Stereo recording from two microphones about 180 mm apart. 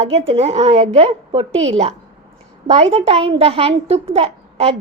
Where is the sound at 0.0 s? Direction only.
35° right (ahead or behind).